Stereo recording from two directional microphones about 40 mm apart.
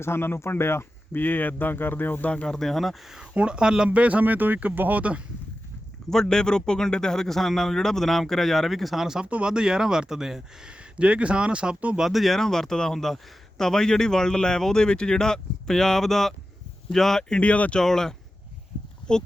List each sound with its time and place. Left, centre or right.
0.0 s speech: left
1.1 s speech: left
2.5 s speech: centre
3.3 s speech: right
3.8 s speech: right
4.9 s speech: right
6.1 s speech: centre
9.2 s speech: right
9.5 s speech: centre
10.7 s speech: right
11.9 s speech: centre
17.4 s speech: left
17.7 s speech: centre